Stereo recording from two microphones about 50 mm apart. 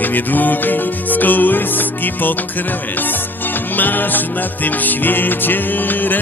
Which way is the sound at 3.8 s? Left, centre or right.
Left.